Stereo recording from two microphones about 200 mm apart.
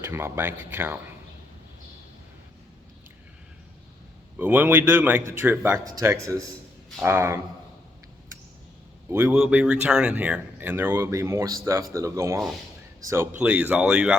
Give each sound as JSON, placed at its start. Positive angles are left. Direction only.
{"t": 0.0, "sound": "speech", "side_deg": -10}
{"t": 4.4, "sound": "speech", "side_deg": -10}
{"t": 9.0, "sound": "speech", "side_deg": -10}